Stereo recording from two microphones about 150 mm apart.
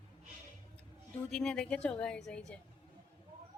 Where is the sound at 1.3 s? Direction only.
5° left (ahead or behind).